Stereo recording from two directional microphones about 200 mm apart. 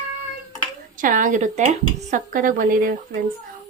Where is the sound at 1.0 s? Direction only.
40° right (ahead or behind).